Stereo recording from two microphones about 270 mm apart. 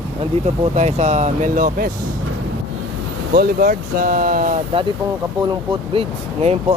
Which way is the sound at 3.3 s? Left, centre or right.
Right.